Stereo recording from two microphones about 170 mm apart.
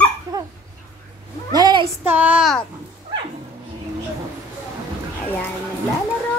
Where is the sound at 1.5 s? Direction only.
25° right (ahead or behind).